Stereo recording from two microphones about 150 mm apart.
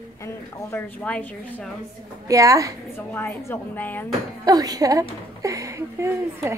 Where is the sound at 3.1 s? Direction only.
15° left (ahead or behind).